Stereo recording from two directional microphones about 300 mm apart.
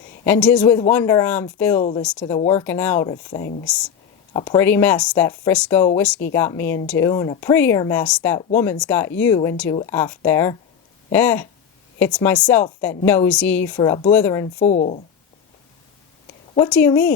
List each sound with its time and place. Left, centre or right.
0.3 s a woman's voice: centre
14.6 s speech: left
16.6 s a woman's voice: centre